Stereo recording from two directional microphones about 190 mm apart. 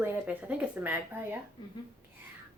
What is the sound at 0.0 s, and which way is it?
Speech, 10° right (ahead or behind).